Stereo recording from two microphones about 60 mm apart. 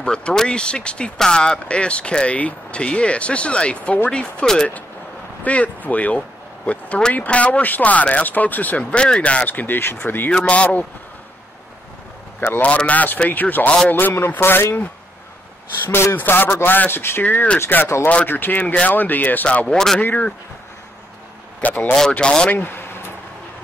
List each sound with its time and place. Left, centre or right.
0.0 s speech: centre
5.4 s speech: left
10.3 s speech: centre
12.4 s a man's voice: left
12.6 s a man's voice: left
19.7 s speech: centre
20.0 s a man's voice: left
21.6 s a man's voice: left
22.1 s speech: centre
22.5 s speech: left